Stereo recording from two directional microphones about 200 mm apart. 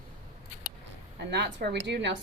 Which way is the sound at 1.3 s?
55° right (ahead or behind).